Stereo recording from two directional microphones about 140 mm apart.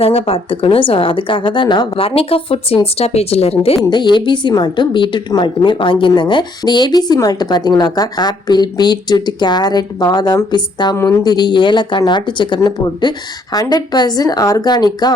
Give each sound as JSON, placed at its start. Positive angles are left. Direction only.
{"t": 0.0, "sound": "a woman's voice", "side_deg": 40}
{"t": 3.8, "sound": "a woman's voice", "side_deg": 30}
{"t": 10.9, "sound": "speech", "side_deg": 20}
{"t": 11.2, "sound": "speech", "side_deg": 30}